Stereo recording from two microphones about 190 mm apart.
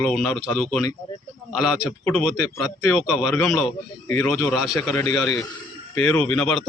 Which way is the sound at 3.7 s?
15° left (ahead or behind).